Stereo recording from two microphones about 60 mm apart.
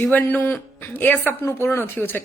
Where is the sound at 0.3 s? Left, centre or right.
Left.